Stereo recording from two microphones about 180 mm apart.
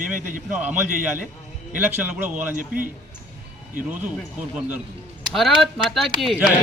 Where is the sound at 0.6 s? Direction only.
10° right (ahead or behind).